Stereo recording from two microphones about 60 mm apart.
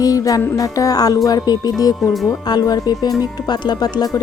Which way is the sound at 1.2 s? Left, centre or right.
Left.